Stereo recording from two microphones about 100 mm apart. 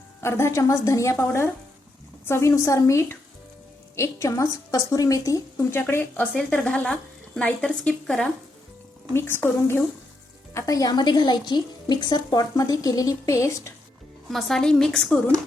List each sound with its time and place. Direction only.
0.2 s a woman's voice: 25° left (ahead or behind)
5.7 s speech: 20° left (ahead or behind)
9.1 s a woman's voice: 20° left (ahead or behind)
10.5 s a woman's voice: 35° left (ahead or behind)
14.3 s a woman's voice: centre (ahead or behind)